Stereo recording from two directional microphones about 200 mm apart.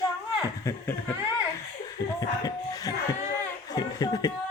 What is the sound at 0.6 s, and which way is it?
Speech, 15° left (ahead or behind).